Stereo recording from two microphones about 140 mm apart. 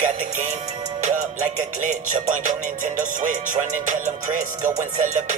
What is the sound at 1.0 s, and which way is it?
Music, 65° right (ahead or behind).